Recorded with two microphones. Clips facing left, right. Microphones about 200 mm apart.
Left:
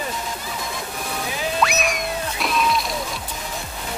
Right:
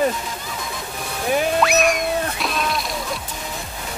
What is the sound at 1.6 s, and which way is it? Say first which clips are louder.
Music: right 4 dB; centre (ahead or behind).